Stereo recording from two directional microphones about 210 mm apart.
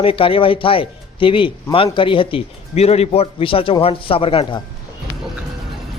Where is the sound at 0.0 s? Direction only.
25° left (ahead or behind).